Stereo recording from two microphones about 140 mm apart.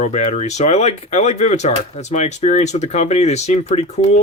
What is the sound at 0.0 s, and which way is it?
Speech, 55° left (ahead or behind).